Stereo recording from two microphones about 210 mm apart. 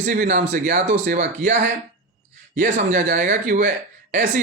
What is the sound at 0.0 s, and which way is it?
Speech, 40° right (ahead or behind).